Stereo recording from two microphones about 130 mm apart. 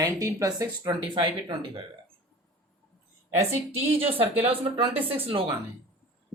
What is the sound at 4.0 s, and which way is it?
Speech, 45° right (ahead or behind).